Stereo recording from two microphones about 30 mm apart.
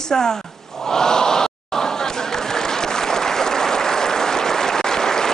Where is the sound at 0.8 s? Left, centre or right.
Centre.